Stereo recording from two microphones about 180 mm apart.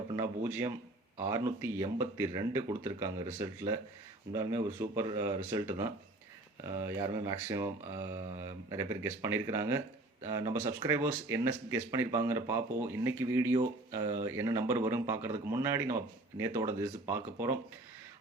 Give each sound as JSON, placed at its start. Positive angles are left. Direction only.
{"t": 0.1, "sound": "speech", "side_deg": -10}